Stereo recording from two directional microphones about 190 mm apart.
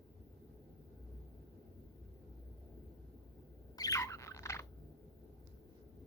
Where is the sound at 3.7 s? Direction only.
20° left (ahead or behind).